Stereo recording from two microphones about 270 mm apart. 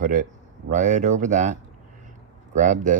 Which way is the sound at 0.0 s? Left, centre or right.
Right.